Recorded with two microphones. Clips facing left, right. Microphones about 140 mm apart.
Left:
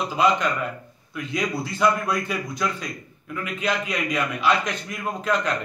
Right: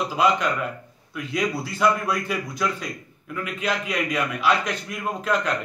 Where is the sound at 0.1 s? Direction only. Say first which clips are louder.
Left 1 dB; 5° right (ahead or behind).